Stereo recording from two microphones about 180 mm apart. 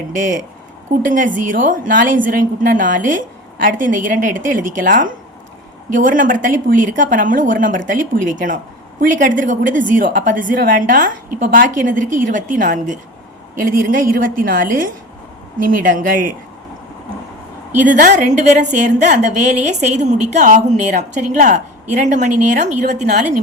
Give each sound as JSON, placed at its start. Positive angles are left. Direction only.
{"t": 0.1, "sound": "a woman's voice", "side_deg": -45}
{"t": 17.7, "sound": "a woman's voice", "side_deg": -45}